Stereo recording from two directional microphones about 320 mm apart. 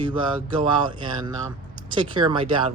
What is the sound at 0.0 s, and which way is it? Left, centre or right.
Speech, centre.